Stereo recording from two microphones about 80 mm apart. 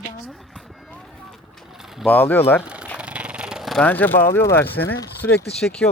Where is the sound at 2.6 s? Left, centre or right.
Centre.